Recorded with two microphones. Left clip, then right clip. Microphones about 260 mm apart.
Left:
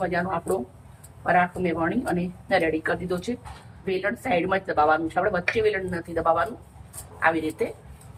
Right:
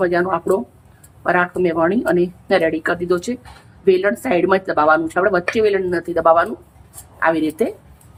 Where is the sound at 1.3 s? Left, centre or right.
Right.